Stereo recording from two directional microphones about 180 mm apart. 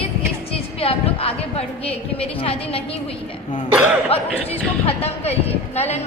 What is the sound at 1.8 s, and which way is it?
Speech, 30° left (ahead or behind).